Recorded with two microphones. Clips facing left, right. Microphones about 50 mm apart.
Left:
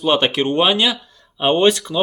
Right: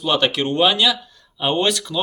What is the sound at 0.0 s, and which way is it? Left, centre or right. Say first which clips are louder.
Speech: left 2 dB; left.